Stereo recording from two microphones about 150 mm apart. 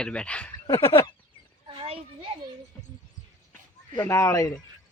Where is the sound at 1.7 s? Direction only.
35° right (ahead or behind).